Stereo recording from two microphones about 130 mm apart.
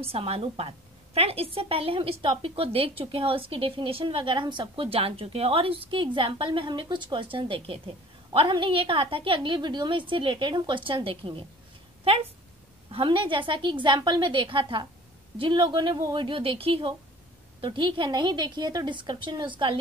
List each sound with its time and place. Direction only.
0.0 s a woman's voice: 50° right (ahead or behind)
12.9 s a woman's voice: 40° right (ahead or behind)